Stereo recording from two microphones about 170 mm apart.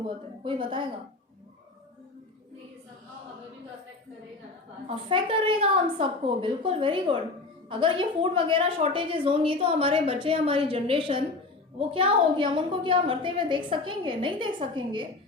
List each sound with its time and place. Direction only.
0.0 s a woman's voice: 30° right (ahead or behind)
4.9 s a woman's voice: 30° right (ahead or behind)